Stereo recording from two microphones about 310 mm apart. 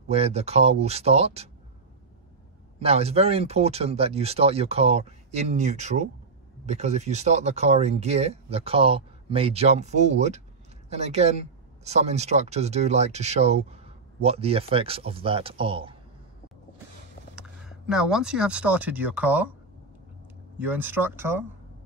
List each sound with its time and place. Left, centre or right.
0.1 s speech: centre
2.8 s speech: centre
17.4 s speech: centre
20.5 s speech: centre